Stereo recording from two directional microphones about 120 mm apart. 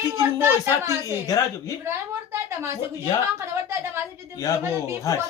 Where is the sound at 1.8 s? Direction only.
20° right (ahead or behind).